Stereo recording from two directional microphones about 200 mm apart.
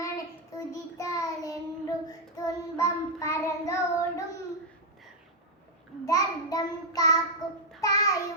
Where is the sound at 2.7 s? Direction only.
15° left (ahead or behind).